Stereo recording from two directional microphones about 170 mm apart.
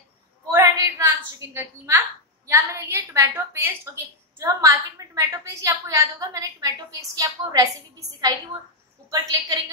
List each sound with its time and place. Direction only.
0.5 s a woman's voice: 15° right (ahead or behind)
9.1 s a woman's voice: 20° right (ahead or behind)